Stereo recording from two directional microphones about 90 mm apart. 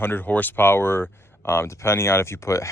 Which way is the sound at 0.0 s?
20° left (ahead or behind).